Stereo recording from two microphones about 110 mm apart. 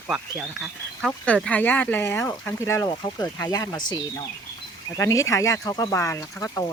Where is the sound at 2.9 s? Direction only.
45° left (ahead or behind).